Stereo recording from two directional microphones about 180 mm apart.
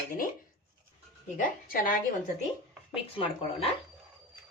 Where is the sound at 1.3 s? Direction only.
50° left (ahead or behind).